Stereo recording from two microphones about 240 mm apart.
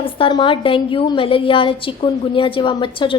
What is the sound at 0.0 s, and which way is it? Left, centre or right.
A woman's voice, left.